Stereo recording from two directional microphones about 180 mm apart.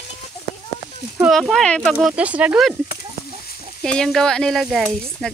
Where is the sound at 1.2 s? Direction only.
Centre (ahead or behind).